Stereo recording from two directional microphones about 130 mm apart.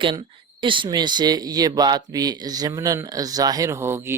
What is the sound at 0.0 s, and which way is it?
Speech, 40° right (ahead or behind).